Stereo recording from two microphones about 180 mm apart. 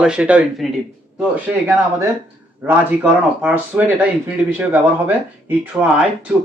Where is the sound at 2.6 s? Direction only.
10° right (ahead or behind).